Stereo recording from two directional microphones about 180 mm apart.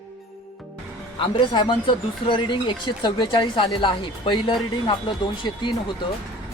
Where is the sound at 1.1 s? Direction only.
30° left (ahead or behind).